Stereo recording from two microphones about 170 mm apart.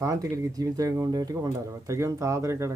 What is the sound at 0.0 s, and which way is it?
Speech, 20° right (ahead or behind).